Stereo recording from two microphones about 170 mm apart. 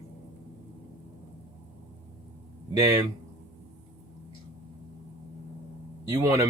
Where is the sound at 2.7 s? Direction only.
20° right (ahead or behind).